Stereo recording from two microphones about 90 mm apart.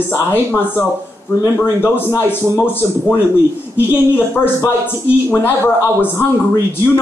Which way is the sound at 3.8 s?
25° left (ahead or behind).